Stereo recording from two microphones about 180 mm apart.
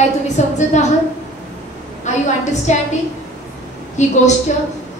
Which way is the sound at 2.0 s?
40° left (ahead or behind).